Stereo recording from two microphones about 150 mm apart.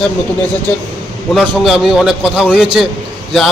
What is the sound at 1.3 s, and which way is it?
A man's voice, centre (ahead or behind).